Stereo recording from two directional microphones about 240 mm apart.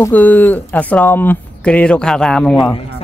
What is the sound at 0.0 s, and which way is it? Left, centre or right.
Speech, centre.